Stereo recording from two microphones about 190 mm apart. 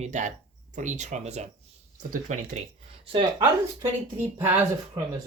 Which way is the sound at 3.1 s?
25° right (ahead or behind).